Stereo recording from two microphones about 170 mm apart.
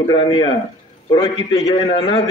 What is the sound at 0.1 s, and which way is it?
A man's voice, 30° left (ahead or behind).